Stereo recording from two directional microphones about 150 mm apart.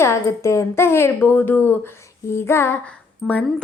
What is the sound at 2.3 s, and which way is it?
Music, 15° left (ahead or behind).